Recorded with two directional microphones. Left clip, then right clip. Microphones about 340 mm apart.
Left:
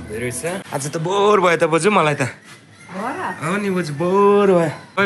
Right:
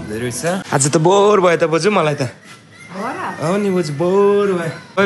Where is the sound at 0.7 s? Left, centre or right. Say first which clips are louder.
Right 14 dB; right.